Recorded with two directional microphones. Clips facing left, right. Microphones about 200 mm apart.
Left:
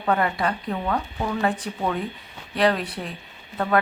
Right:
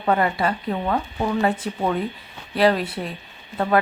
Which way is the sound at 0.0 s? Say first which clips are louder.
Right 2 dB; 15° right (ahead or behind).